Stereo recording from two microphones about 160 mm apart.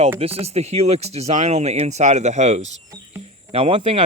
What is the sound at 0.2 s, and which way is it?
Speech, 35° right (ahead or behind).